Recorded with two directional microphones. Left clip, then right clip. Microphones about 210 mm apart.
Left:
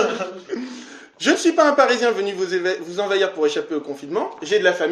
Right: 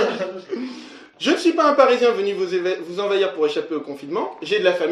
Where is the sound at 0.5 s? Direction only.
35° left (ahead or behind).